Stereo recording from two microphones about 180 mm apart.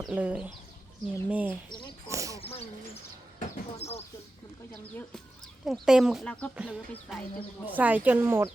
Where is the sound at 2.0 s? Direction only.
15° right (ahead or behind).